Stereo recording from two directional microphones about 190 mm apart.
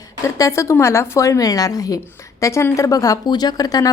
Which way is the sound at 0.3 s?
15° left (ahead or behind).